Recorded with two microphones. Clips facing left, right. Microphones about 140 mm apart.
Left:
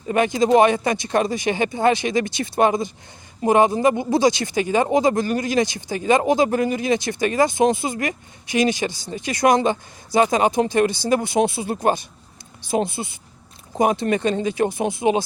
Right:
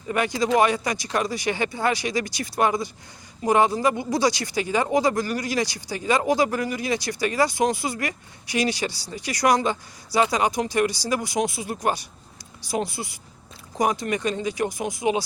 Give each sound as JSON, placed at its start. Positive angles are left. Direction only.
{"t": 0.1, "sound": "speech", "side_deg": 20}